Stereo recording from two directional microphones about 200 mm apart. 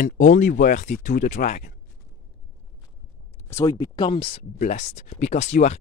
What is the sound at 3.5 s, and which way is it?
Speech, 15° left (ahead or behind).